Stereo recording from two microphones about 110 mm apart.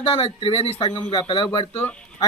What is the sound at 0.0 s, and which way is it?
Speech, 55° left (ahead or behind).